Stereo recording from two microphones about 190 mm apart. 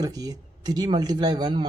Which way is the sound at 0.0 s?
20° right (ahead or behind).